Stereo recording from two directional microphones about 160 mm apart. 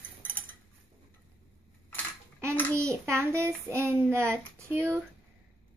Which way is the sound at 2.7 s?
15° right (ahead or behind).